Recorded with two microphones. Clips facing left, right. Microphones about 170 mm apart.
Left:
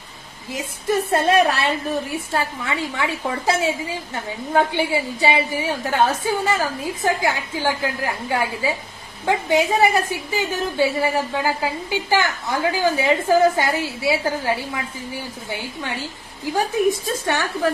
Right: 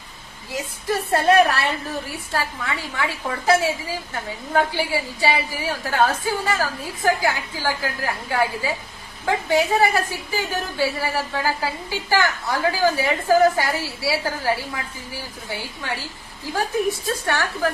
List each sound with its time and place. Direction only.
0.5 s a woman's voice: 20° left (ahead or behind)
16.9 s a woman's voice: 20° left (ahead or behind)